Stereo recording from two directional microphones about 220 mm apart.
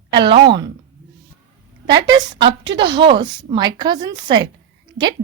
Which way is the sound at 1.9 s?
20° right (ahead or behind).